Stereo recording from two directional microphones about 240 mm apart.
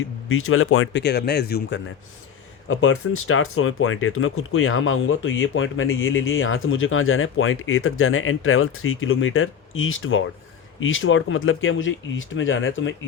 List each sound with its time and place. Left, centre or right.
0.3 s speech: left
2.6 s speech: left